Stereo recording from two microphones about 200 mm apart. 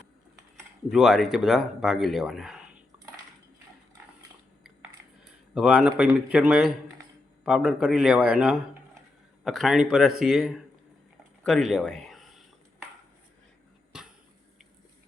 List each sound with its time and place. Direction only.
0.9 s speech: centre (ahead or behind)
5.5 s speech: 5° right (ahead or behind)